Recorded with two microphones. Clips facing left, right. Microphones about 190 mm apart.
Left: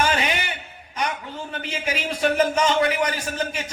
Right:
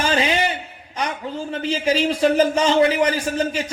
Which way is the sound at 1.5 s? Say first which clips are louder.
Right 9 dB; 30° right (ahead or behind).